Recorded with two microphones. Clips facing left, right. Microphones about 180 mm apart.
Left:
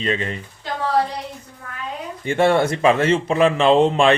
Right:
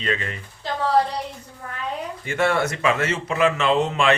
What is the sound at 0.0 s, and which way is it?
Speech, 25° left (ahead or behind).